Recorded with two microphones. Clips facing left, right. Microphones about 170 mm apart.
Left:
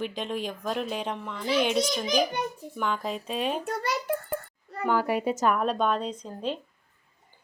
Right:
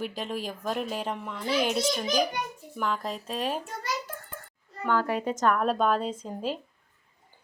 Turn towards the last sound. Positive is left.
turn(degrees=-5)  # may be behind; listen again after turning